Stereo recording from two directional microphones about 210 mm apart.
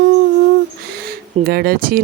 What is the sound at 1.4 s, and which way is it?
Music, 45° right (ahead or behind).